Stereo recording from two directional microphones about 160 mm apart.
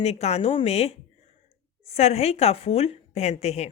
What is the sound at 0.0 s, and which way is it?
Speech, 40° left (ahead or behind).